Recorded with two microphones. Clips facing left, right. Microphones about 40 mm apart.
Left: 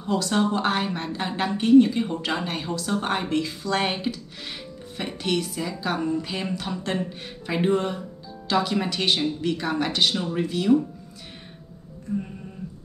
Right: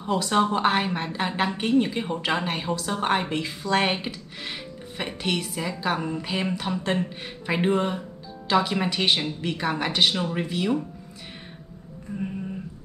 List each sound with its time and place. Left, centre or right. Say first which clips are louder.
0.0 s a woman's voice: right 1 dB; centre